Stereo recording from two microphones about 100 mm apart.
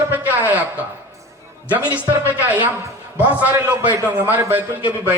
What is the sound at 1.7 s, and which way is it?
Speech, 15° right (ahead or behind).